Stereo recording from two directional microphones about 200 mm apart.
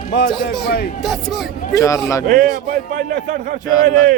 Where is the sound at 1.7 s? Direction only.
15° left (ahead or behind).